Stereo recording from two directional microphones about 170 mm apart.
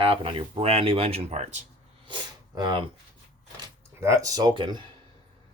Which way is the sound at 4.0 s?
20° right (ahead or behind).